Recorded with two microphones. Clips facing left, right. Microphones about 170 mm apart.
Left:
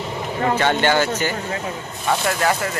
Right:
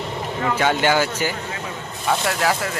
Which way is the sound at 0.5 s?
10° right (ahead or behind).